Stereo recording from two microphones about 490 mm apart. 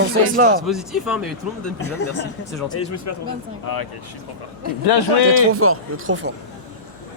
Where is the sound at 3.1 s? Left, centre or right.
Left.